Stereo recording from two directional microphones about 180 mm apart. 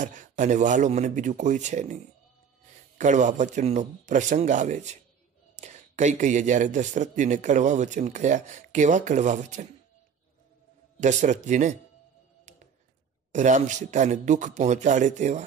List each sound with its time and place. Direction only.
0.0 s speech: 45° right (ahead or behind)
3.0 s speech: 40° right (ahead or behind)
11.0 s speech: 40° right (ahead or behind)
12.5 s a sound: 40° right (ahead or behind)
13.3 s speech: 40° right (ahead or behind)